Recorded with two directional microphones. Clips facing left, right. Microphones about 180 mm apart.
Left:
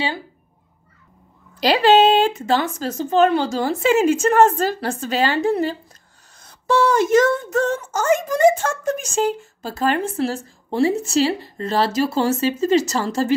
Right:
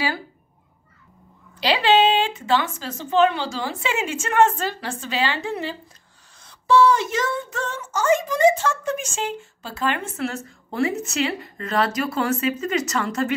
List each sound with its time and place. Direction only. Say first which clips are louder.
1.6 s speech: left 4 dB; 45° left (ahead or behind)